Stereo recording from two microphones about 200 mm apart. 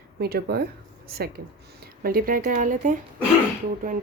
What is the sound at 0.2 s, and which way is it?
Speech, 50° right (ahead or behind).